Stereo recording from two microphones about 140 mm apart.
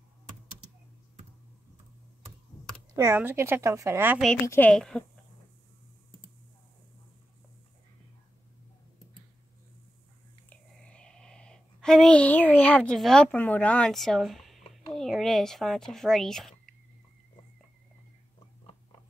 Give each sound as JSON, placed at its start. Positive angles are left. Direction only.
{"t": 3.0, "sound": "a woman's voice", "side_deg": -15}
{"t": 4.5, "sound": "a woman's voice", "side_deg": 10}
{"t": 10.5, "sound": "speech", "side_deg": 5}